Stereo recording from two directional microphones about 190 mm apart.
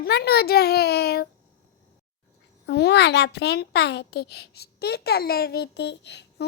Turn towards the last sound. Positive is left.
turn(degrees=65)  # may be behind; listen again after turning